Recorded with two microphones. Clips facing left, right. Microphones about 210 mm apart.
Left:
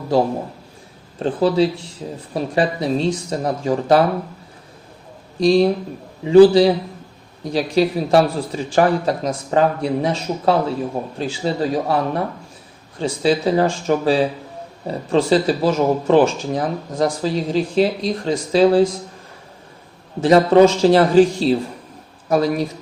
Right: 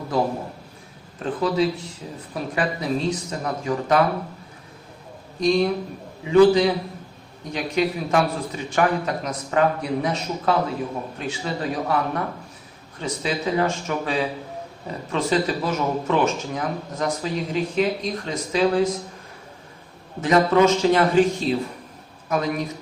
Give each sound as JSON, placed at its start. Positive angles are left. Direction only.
{"t": 1.2, "sound": "speech", "side_deg": 30}
{"t": 5.4, "sound": "speech", "side_deg": 35}
{"t": 20.2, "sound": "speech", "side_deg": 35}